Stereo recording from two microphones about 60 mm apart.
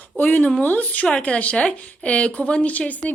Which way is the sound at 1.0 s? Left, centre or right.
Centre.